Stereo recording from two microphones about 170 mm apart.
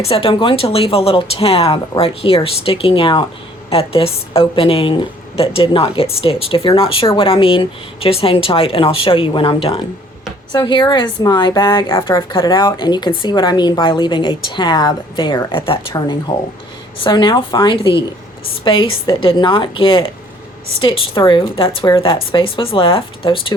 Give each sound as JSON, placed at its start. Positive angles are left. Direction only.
{"t": 0.0, "sound": "speech", "side_deg": 35}